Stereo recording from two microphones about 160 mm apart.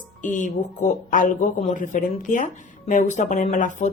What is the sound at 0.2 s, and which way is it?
Speech, 55° left (ahead or behind).